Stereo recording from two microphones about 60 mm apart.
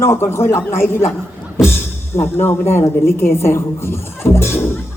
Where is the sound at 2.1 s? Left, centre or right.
Left.